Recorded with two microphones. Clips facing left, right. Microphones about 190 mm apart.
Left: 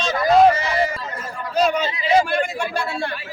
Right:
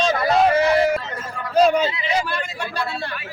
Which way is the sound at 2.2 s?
50° left (ahead or behind).